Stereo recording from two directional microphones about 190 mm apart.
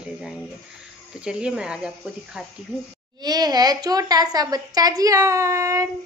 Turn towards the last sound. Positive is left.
turn(degrees=-15)  # may be behind; listen again after turning